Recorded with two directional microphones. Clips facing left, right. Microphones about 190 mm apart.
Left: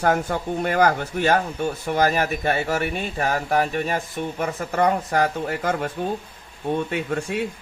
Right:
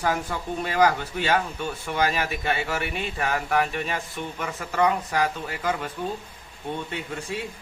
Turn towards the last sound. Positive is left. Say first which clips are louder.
# left 7 dB
turn(degrees=60)  # may be behind; listen again after turning